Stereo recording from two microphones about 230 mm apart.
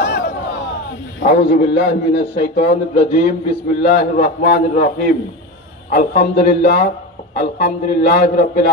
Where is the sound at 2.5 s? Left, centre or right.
Left.